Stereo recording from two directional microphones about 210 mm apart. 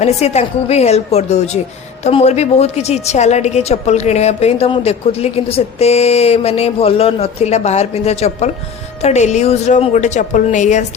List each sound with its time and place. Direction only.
0.0 s a woman's voice: 30° left (ahead or behind)